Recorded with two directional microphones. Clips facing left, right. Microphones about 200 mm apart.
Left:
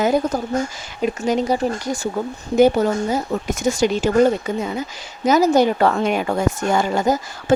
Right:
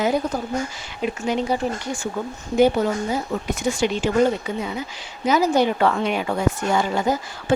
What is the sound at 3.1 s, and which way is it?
Speech, 45° left (ahead or behind).